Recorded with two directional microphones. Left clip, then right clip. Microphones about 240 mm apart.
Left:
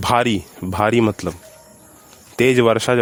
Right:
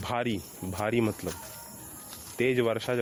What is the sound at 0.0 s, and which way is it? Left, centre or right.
Speech, left.